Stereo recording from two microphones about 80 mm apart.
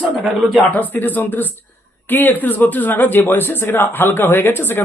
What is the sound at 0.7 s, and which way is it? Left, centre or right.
Speech, left.